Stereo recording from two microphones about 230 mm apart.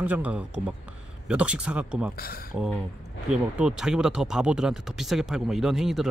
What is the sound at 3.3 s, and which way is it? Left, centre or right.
Speech, centre.